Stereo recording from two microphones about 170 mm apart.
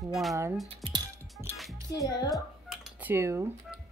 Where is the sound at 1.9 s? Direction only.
25° left (ahead or behind).